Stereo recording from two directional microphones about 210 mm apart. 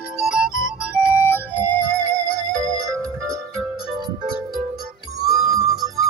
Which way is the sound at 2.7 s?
15° right (ahead or behind).